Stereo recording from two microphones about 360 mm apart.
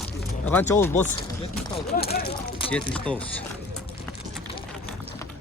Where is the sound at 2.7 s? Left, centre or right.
Centre.